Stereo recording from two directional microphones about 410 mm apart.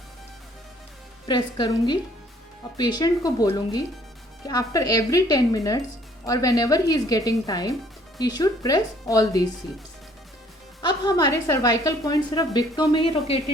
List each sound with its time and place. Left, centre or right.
1.3 s a woman's voice: centre
10.8 s a woman's voice: centre